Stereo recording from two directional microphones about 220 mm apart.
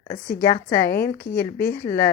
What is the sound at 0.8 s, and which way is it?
Speech, 45° left (ahead or behind).